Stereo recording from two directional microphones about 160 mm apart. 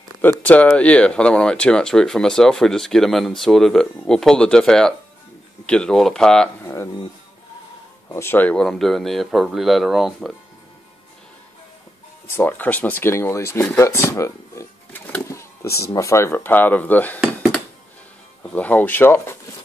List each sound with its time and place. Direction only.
0.2 s speech: 10° left (ahead or behind)
6.6 s a sound: 15° left (ahead or behind)
8.1 s speech: 15° left (ahead or behind); by 10.3 s centre (ahead or behind)
12.4 s speech: 10° left (ahead or behind)
13.7 s a sound: 15° left (ahead or behind)
15.9 s speech: 20° left (ahead or behind)
18.5 s speech: 10° left (ahead or behind)